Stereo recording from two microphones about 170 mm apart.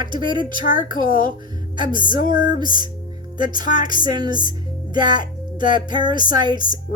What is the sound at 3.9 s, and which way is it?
Speech, 25° right (ahead or behind).